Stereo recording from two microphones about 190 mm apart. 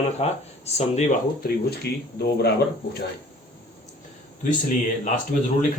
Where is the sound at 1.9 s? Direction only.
60° left (ahead or behind).